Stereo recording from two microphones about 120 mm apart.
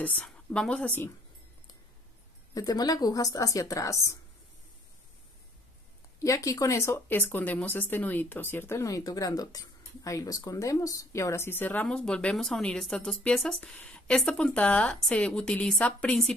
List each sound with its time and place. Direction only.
0.0 s speech: 10° left (ahead or behind)
2.5 s a woman's voice: 30° left (ahead or behind)
6.2 s speech: 25° left (ahead or behind); by 16.3 s 5° left (ahead or behind)